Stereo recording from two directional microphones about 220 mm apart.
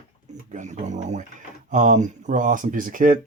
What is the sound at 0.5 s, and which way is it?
Speech, 35° right (ahead or behind).